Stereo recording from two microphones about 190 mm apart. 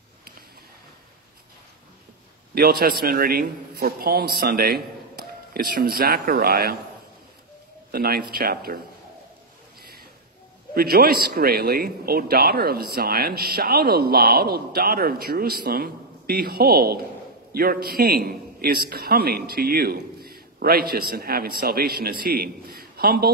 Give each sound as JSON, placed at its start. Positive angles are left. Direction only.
{"t": 2.5, "sound": "a man's voice", "side_deg": -55}
{"t": 7.9, "sound": "a man's voice", "side_deg": -55}
{"t": 10.7, "sound": "a man's voice", "side_deg": -55}